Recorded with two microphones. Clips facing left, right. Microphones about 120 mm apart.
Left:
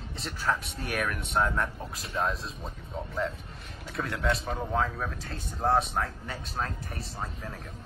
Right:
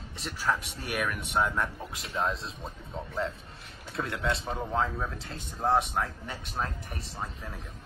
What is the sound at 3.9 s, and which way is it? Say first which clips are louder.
A man's voice: left 1 dB; 25° right (ahead or behind).